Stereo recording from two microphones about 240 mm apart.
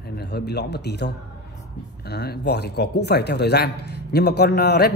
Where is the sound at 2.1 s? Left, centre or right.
Left.